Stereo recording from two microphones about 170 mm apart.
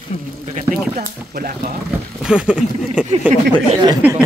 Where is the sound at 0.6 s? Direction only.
50° right (ahead or behind).